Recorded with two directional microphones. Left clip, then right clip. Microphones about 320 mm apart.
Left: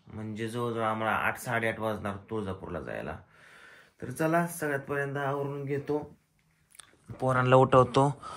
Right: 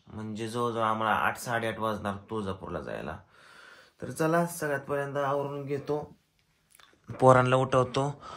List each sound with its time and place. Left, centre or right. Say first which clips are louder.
0.2 s speech: right 2 dB; centre
7.1 s speech: right 10 dB; right
7.3 s speech: left 3 dB; centre